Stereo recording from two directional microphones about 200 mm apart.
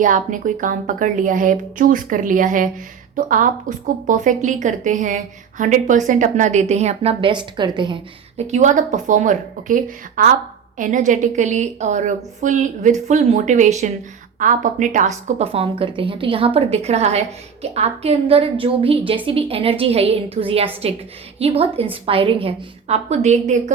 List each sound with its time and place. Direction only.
0.0 s a woman's voice: 40° right (ahead or behind); by 7.9 s 25° right (ahead or behind)
8.4 s a woman's voice: 35° right (ahead or behind)